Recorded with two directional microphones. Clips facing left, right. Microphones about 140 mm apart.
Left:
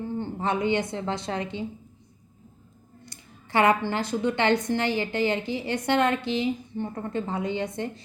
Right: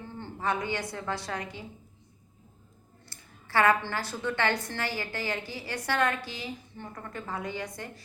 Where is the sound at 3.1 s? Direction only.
20° left (ahead or behind).